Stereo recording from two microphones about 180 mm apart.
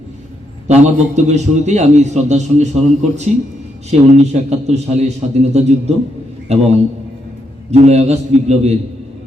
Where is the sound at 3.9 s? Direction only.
40° right (ahead or behind).